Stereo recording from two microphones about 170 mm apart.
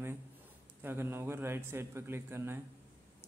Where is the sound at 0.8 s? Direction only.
15° right (ahead or behind).